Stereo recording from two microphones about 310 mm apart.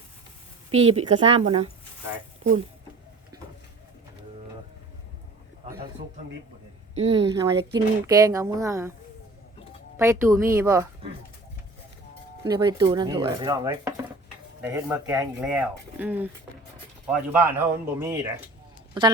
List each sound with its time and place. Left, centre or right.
0.7 s speech: centre
6.9 s speech: centre
10.0 s speech: centre
12.5 s speech: centre